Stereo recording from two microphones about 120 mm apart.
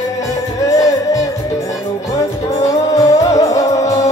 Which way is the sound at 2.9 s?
30° left (ahead or behind).